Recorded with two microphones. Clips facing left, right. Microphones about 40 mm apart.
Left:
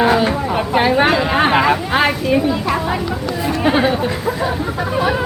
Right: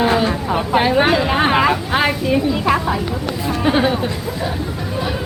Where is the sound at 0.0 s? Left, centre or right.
Centre.